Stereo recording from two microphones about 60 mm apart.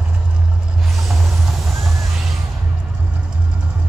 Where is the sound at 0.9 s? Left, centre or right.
Centre.